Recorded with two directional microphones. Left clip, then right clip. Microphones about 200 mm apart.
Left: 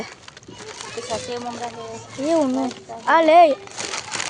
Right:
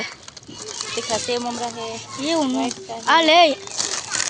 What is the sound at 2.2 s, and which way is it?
Speech, 25° left (ahead or behind).